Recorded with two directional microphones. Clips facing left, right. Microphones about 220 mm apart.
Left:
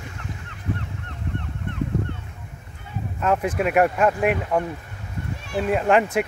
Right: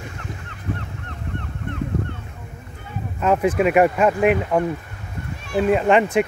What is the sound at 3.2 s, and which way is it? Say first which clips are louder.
Speech: right 4 dB; centre (ahead or behind).